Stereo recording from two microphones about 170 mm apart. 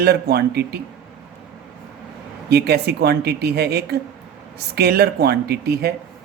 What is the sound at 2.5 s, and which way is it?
Speech, 70° right (ahead or behind).